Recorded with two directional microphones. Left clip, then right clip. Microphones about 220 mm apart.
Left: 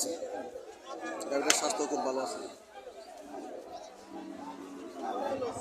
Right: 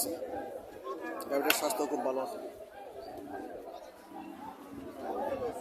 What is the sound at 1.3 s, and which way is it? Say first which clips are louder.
Speech: even; 5° right (ahead or behind).